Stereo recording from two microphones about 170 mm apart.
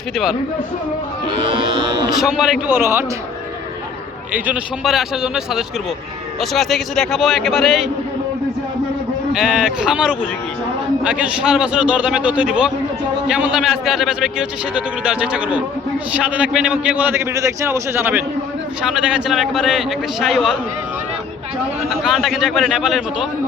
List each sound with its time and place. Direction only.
1.3 s music: 30° right (ahead or behind)
2.1 s a man's voice: centre (ahead or behind)
2.6 s a man's voice: 15° right (ahead or behind)
4.4 s a man's voice: 5° right (ahead or behind)
9.3 s a man's voice: centre (ahead or behind)
21.8 s a man's voice: centre (ahead or behind)